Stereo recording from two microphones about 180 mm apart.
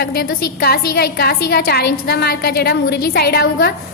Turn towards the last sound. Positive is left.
turn(degrees=60)  # may be behind; listen again after turning